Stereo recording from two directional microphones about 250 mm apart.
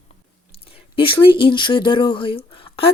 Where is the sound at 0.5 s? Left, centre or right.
Left.